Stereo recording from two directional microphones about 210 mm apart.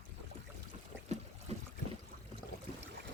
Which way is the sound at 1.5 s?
30° right (ahead or behind).